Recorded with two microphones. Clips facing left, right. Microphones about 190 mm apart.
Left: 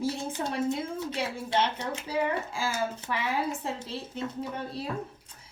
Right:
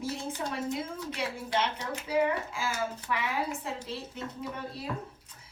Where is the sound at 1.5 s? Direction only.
25° left (ahead or behind).